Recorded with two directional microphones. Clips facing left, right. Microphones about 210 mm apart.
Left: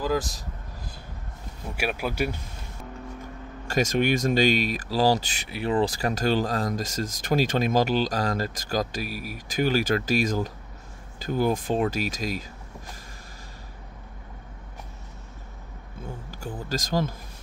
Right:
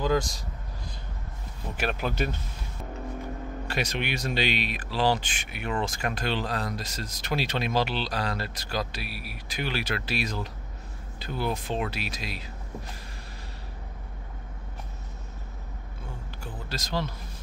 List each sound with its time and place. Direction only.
0.0 s speech: 5° left (ahead or behind)
1.8 s speech: 10° left (ahead or behind)
3.6 s speech: 45° left (ahead or behind)
16.3 s speech: 45° left (ahead or behind)